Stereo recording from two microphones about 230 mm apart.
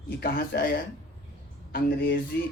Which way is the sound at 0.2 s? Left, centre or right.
Left.